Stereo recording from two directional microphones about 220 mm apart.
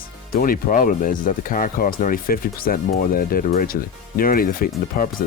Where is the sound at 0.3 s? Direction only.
40° left (ahead or behind).